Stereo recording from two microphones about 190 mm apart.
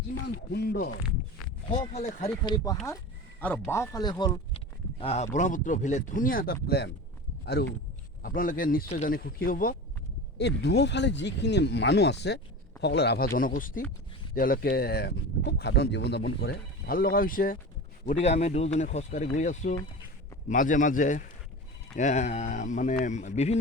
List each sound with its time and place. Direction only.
0.5 s speech: 55° left (ahead or behind)
1.7 s speech: 35° left (ahead or behind)
2.3 s speech: 20° left (ahead or behind)
4.9 s speech: 35° left (ahead or behind); by 9.7 s 50° left (ahead or behind)
10.3 s speech: 60° left (ahead or behind)
16.4 s speech: 55° left (ahead or behind)
18.0 s speech: 35° left (ahead or behind)